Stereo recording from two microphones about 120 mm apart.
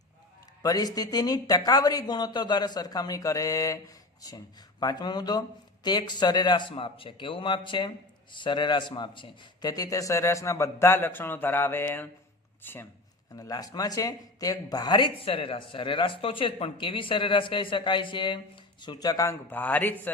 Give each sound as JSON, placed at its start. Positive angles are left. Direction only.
{"t": 0.6, "sound": "speech", "side_deg": 30}
{"t": 13.3, "sound": "speech", "side_deg": 30}
{"t": 19.5, "sound": "speech", "side_deg": 15}